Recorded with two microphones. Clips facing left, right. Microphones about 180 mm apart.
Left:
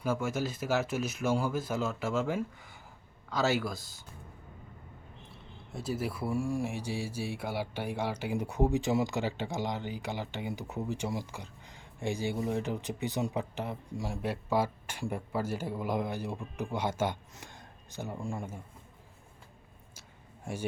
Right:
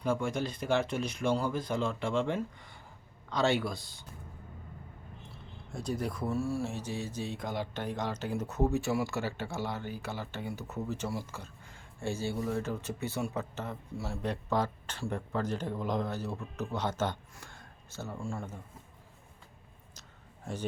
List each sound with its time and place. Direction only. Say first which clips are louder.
0.0 s speech: even; 5° left (ahead or behind)
5.7 s speech: even; 5° left (ahead or behind)